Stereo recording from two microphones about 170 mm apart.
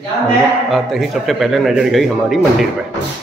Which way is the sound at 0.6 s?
Centre (ahead or behind).